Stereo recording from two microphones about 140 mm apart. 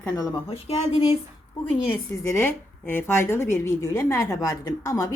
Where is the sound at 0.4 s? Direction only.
50° left (ahead or behind).